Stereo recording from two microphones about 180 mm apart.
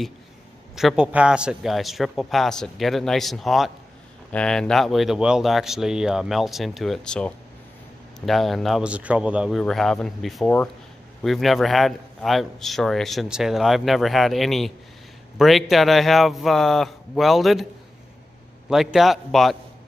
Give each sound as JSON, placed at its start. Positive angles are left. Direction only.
{"t": 0.7, "sound": "a man's voice", "side_deg": -5}
{"t": 18.7, "sound": "a man's voice", "side_deg": 0}